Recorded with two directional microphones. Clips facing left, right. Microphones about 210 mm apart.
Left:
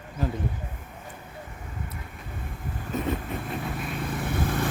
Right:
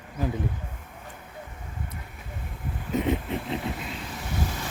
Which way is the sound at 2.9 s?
20° right (ahead or behind).